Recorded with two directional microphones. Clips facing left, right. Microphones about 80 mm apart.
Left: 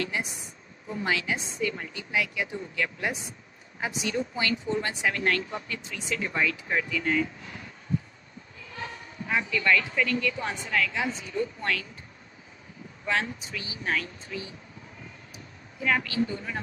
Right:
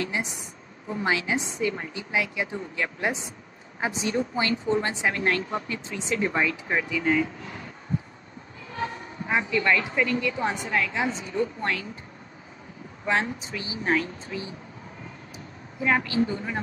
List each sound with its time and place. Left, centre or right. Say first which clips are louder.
0.0 s a woman's voice: right 2 dB; right
8.7 s a woman's voice: right 6 dB; right
13.0 s a woman's voice: right 3 dB; right
15.8 s a woman's voice: right 3 dB; right